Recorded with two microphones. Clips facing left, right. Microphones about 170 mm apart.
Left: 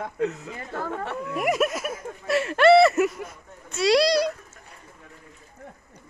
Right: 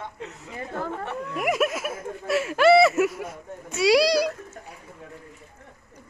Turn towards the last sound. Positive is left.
turn(degrees=-10)  # may be behind; listen again after turning